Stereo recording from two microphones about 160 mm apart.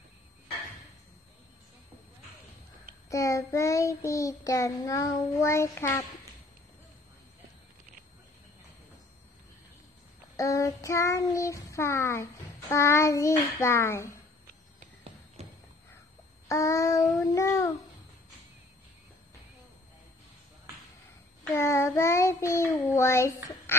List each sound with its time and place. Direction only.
3.1 s child singing: 20° left (ahead or behind)
10.3 s child singing: 20° left (ahead or behind)
16.4 s child singing: 20° left (ahead or behind)
21.5 s child singing: 15° left (ahead or behind)